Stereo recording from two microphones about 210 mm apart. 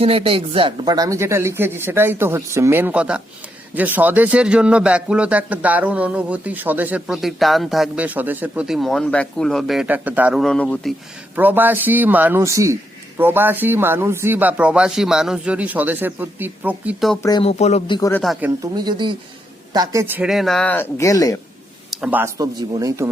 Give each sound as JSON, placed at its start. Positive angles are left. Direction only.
{"t": 0.0, "sound": "speech", "side_deg": -25}
{"t": 11.3, "sound": "speech", "side_deg": -10}
{"t": 17.2, "sound": "speech", "side_deg": 20}
{"t": 17.6, "sound": "speech", "side_deg": 30}
{"t": 18.1, "sound": "speech", "side_deg": 0}
{"t": 18.7, "sound": "speech", "side_deg": -20}
{"t": 21.8, "sound": "speech", "side_deg": -5}